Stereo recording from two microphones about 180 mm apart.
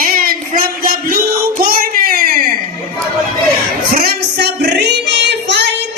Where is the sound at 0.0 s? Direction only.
55° right (ahead or behind).